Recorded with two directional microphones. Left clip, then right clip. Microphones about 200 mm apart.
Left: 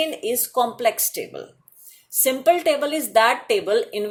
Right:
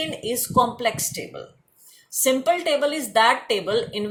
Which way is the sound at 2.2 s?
40° left (ahead or behind).